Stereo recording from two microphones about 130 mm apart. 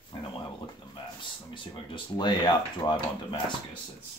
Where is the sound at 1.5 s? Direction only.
40° left (ahead or behind).